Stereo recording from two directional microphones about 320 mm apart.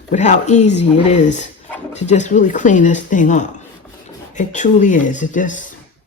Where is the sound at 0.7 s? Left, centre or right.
Left.